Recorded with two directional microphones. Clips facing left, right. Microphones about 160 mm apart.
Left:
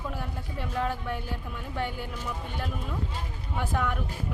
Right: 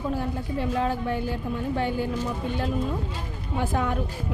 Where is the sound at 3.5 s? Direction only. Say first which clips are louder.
Right 4 dB; 35° right (ahead or behind).